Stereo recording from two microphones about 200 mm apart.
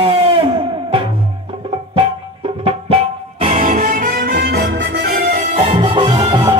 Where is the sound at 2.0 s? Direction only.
25° right (ahead or behind); by 5.6 s 45° right (ahead or behind).